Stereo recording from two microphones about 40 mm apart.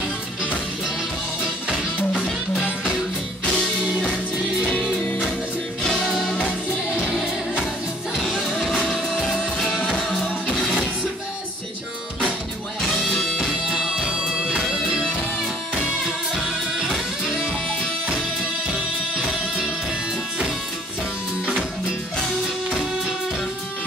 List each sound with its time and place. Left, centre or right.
3.5 s music: centre
8.2 s music: centre
12.9 s music: centre
13.5 s music: centre
18.7 s music: centre